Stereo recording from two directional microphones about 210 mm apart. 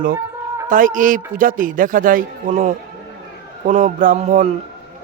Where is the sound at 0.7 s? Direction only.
40° right (ahead or behind).